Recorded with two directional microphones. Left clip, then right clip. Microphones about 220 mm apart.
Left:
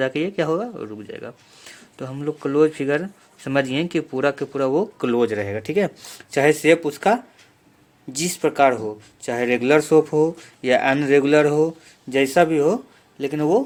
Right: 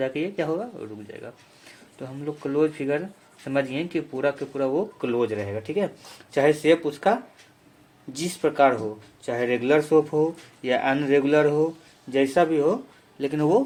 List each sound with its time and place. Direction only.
0.0 s speech: 35° left (ahead or behind)
13.1 s speech: 25° left (ahead or behind)